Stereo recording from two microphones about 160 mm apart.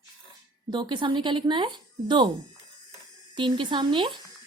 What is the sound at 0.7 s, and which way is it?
Speech, 30° right (ahead or behind).